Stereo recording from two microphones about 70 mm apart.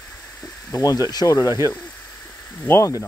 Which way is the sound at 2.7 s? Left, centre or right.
Left.